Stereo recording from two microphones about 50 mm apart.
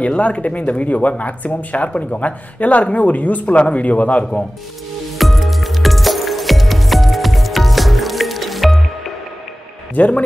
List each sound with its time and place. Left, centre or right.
0.0 s speech: left
5.1 s music: centre
9.9 s speech: left